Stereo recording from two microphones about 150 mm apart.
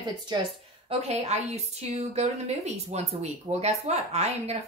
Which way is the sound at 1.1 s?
50° right (ahead or behind).